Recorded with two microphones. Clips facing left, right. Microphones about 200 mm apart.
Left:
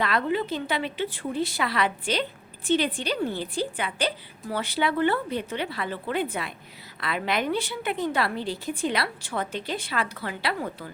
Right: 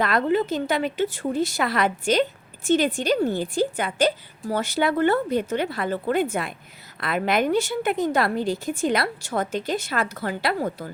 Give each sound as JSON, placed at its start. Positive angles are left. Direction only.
{"t": 0.0, "sound": "a woman's voice", "side_deg": -45}